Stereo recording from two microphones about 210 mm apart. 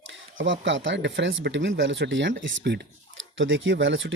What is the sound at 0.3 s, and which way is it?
Speech, 65° right (ahead or behind).